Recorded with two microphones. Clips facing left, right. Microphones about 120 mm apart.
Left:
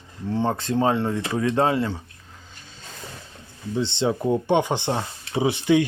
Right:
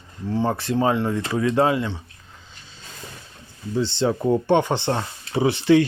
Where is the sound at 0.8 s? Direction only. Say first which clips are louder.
Right 1 dB; 25° left (ahead or behind).